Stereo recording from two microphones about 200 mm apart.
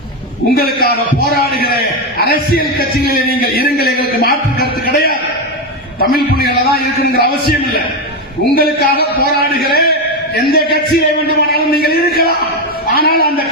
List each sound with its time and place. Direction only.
0.5 s a man's voice: 50° left (ahead or behind)